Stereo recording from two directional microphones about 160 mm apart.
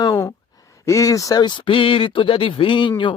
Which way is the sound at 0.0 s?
25° left (ahead or behind).